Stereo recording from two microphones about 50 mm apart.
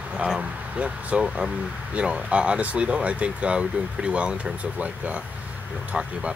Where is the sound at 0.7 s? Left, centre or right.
Right.